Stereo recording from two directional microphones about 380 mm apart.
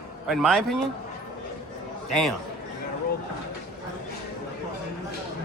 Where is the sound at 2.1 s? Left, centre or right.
Right.